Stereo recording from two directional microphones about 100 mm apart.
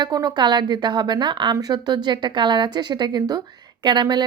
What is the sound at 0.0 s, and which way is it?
Speech, 45° right (ahead or behind).